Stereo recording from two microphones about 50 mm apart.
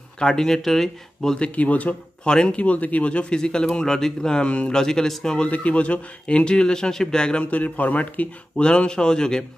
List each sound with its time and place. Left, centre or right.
0.2 s speech: centre
1.4 s speech: left
2.2 s speech: centre
4.5 s speech: left
4.7 s speech: centre
5.5 s speech: left
7.5 s a man's voice: left
8.6 s speech: centre